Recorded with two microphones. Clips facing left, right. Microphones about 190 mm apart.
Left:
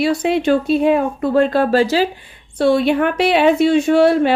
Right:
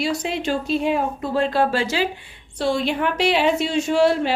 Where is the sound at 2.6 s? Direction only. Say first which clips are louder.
Left 7 dB; 55° left (ahead or behind).